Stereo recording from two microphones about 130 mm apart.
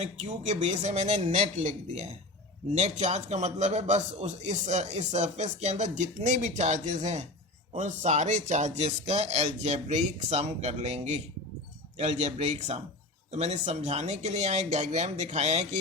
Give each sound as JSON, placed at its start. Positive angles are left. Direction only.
{"t": 0.0, "sound": "a man's voice", "side_deg": -60}
{"t": 2.7, "sound": "a man's voice", "side_deg": -60}